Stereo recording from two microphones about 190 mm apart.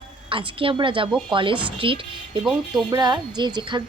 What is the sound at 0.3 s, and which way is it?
A woman's voice, 25° right (ahead or behind).